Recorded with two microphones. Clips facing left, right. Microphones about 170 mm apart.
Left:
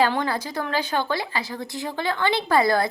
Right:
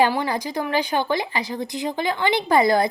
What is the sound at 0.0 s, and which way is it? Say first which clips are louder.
Speech: right 2 dB; 15° right (ahead or behind).